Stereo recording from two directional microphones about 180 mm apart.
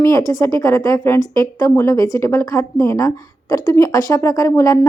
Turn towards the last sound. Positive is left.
turn(degrees=20)  # may be behind; listen again after turning